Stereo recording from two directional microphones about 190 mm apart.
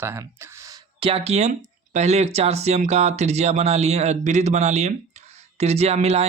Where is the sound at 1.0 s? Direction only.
30° right (ahead or behind).